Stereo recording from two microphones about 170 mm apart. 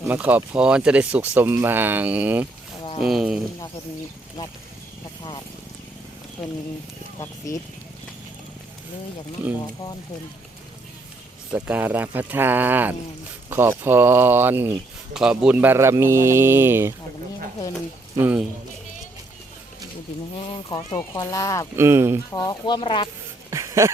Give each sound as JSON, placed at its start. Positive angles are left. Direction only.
{"t": 0.1, "sound": "speech", "side_deg": -10}
{"t": 7.2, "sound": "speech", "side_deg": 20}
{"t": 11.5, "sound": "speech", "side_deg": -10}
{"t": 18.2, "sound": "speech", "side_deg": -10}
{"t": 20.3, "sound": "speech", "side_deg": 30}
{"t": 21.8, "sound": "speech", "side_deg": -15}
{"t": 22.3, "sound": "speech", "side_deg": 20}
{"t": 23.5, "sound": "dog", "side_deg": -15}